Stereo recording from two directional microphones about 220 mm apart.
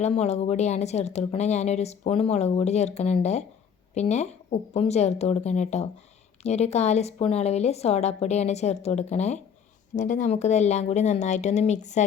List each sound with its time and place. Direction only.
0.0 s speech: 30° left (ahead or behind)